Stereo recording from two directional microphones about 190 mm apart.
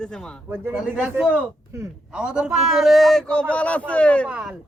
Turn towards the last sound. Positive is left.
turn(degrees=-5)  # may be behind; listen again after turning